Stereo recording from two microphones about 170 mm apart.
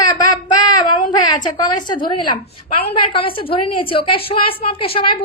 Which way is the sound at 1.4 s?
25° left (ahead or behind).